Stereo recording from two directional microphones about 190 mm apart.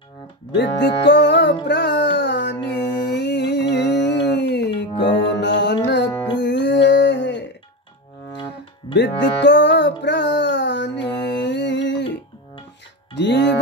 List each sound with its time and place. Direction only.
0.6 s music: 65° left (ahead or behind)
8.9 s music: 65° left (ahead or behind)
13.1 s music: 65° left (ahead or behind)